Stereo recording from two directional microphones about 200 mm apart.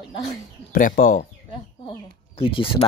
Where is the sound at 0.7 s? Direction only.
40° left (ahead or behind).